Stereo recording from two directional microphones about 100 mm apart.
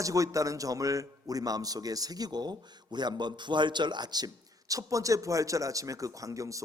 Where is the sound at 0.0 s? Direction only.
35° right (ahead or behind).